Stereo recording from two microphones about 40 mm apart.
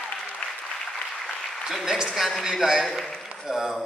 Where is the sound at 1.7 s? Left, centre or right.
Centre.